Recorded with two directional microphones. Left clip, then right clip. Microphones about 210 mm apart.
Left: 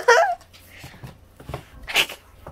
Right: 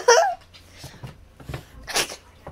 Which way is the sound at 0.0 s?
10° right (ahead or behind).